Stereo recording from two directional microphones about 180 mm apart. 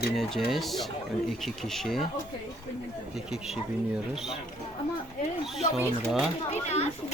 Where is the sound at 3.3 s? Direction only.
5° right (ahead or behind).